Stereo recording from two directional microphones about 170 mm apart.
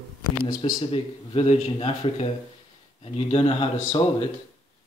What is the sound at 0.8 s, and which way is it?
Speech, 35° left (ahead or behind).